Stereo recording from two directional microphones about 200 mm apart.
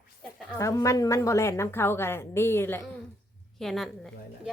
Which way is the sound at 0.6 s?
15° left (ahead or behind).